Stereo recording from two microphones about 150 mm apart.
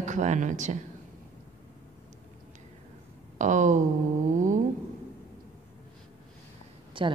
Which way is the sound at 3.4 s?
55° right (ahead or behind).